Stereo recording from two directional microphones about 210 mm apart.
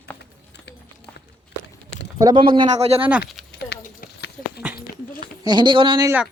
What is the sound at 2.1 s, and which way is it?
Speech, 20° right (ahead or behind).